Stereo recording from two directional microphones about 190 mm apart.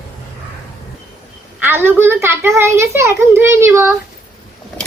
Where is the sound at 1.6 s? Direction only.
10° right (ahead or behind).